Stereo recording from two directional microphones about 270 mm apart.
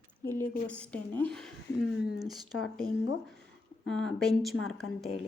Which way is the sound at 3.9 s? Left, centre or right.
Centre.